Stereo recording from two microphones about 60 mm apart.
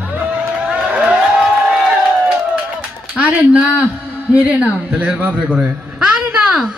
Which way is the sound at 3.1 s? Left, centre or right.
Right.